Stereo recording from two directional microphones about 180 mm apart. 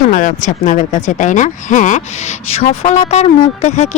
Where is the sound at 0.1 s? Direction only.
45° left (ahead or behind).